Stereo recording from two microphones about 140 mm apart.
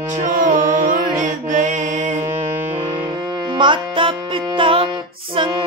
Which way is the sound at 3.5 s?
35° right (ahead or behind).